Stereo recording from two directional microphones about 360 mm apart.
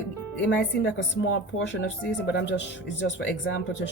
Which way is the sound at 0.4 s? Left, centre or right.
Left.